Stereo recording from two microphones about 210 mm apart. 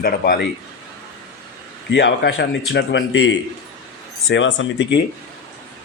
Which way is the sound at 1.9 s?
55° left (ahead or behind).